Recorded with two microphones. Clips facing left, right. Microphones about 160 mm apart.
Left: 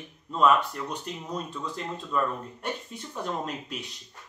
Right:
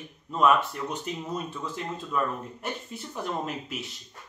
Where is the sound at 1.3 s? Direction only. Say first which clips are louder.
Right 1 dB; 5° right (ahead or behind).